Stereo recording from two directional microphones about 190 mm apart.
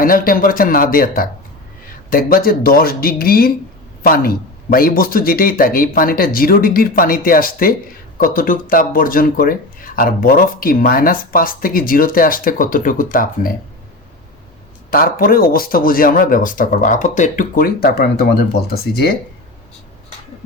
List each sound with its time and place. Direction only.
0.0 s speech: 50° left (ahead or behind)
14.8 s speech: 50° left (ahead or behind)